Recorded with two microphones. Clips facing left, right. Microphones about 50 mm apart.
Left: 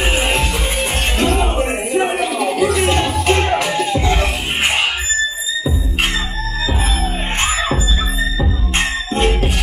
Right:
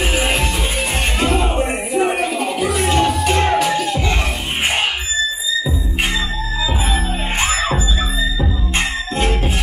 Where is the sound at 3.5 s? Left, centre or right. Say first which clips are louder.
Right 1 dB; centre.